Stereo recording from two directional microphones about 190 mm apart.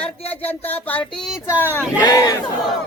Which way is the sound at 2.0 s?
20° left (ahead or behind).